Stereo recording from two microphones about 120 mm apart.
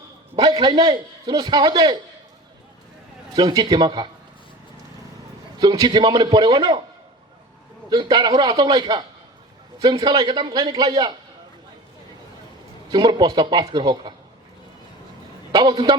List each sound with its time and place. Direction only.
0.3 s a man's voice: 40° right (ahead or behind)
3.3 s a man's voice: 35° right (ahead or behind)
5.5 s a man's voice: 35° right (ahead or behind)
7.9 s a man's voice: 35° right (ahead or behind)
12.9 s a man's voice: 40° right (ahead or behind)
15.5 s a man's voice: 40° right (ahead or behind)